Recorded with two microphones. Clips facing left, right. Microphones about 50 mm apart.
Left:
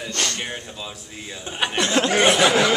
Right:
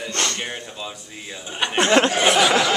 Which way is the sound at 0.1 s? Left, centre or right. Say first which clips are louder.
Right 1 dB; right.